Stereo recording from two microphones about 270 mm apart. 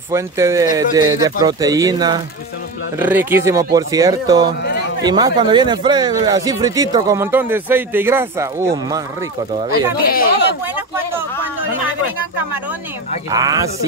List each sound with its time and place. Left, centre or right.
0.1 s speech: centre
10.0 s speech: left
11.1 s speech: centre
13.3 s speech: centre